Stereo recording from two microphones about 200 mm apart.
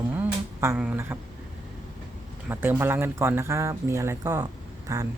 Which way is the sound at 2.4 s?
10° right (ahead or behind).